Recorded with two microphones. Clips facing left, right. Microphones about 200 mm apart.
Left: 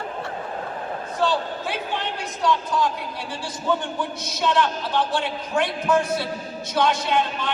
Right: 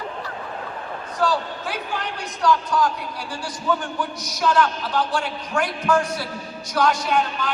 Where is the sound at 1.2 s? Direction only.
25° left (ahead or behind).